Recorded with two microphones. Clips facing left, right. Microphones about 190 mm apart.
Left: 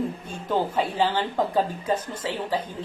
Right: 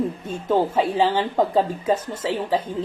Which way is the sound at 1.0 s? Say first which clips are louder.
Right 3 dB; 25° right (ahead or behind).